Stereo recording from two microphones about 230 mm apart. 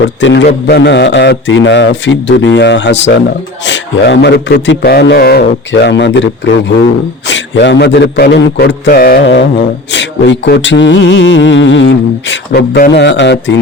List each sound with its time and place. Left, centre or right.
0.2 s a man's voice: left
12.3 s a man's voice: left